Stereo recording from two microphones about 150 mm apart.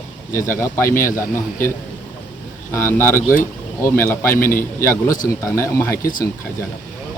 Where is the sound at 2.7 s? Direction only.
15° left (ahead or behind).